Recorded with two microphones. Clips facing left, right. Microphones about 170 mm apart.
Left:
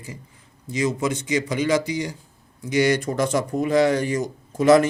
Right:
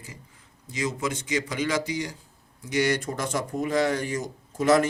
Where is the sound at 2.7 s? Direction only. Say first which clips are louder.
Left 5 dB; 90° left.